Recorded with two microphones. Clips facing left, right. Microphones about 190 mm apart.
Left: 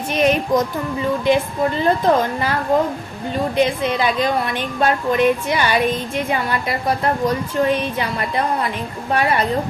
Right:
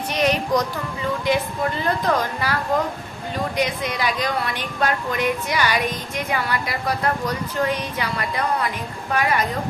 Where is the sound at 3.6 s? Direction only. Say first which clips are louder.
Left 7 dB; 25° left (ahead or behind).